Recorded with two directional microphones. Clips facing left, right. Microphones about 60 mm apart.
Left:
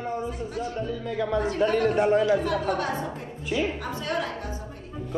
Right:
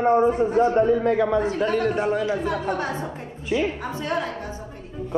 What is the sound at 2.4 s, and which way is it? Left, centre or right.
A woman's voice, centre.